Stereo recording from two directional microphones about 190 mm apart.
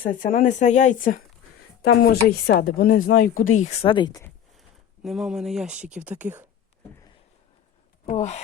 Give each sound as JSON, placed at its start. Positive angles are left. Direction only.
{"t": 0.0, "sound": "speech", "side_deg": 45}
{"t": 5.0, "sound": "speech", "side_deg": 0}
{"t": 8.0, "sound": "speech", "side_deg": 35}